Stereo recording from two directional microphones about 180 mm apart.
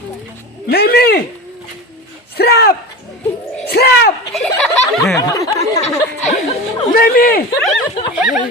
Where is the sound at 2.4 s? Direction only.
60° left (ahead or behind).